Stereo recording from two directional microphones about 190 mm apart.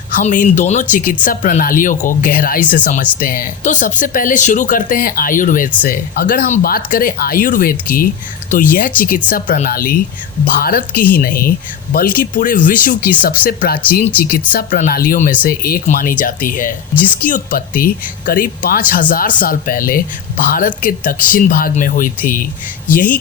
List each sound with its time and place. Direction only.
0.2 s speech: 40° left (ahead or behind)